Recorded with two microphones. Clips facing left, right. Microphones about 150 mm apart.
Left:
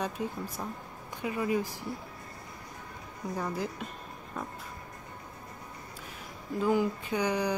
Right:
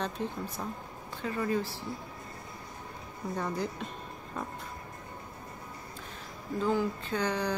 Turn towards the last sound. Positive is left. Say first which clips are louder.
# left 2 dB
turn(degrees=10)  # may be behind; listen again after turning